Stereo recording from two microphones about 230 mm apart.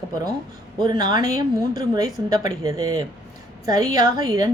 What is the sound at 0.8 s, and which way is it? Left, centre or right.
A woman's voice, centre.